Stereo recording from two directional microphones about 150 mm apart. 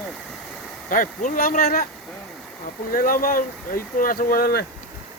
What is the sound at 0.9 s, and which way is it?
Speech, 60° left (ahead or behind).